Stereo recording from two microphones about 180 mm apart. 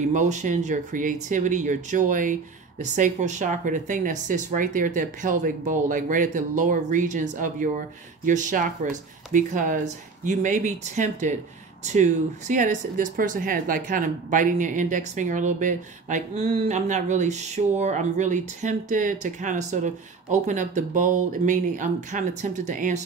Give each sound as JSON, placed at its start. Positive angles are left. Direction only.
{"t": 0.0, "sound": "speech", "side_deg": -40}